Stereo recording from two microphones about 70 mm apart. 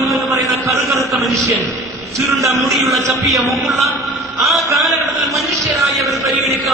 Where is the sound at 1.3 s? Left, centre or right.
Right.